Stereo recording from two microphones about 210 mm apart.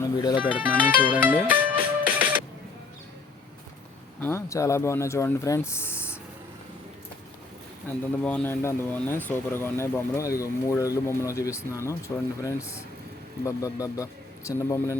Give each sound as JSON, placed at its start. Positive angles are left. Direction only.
{"t": 0.0, "sound": "speech", "side_deg": 20}
{"t": 0.6, "sound": "music", "side_deg": -10}
{"t": 4.2, "sound": "speech", "side_deg": 10}
{"t": 8.2, "sound": "speech", "side_deg": 10}